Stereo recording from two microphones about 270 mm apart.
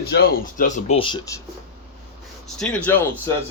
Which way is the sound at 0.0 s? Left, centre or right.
Left.